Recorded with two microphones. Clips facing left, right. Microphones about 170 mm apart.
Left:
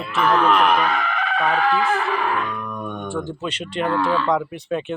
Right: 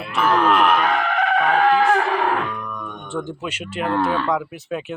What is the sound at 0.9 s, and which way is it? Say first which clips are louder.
Music: right 4 dB; 55° right (ahead or behind).